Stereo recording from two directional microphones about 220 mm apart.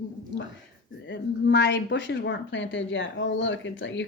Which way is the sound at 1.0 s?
55° left (ahead or behind).